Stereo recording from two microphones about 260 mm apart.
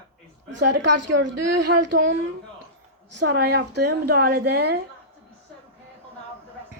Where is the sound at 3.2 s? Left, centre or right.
Right.